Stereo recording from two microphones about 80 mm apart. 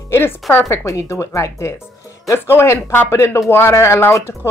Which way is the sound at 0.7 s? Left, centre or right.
Left.